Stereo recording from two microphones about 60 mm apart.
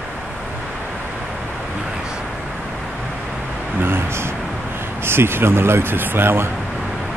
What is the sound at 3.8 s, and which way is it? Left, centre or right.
Speech, right.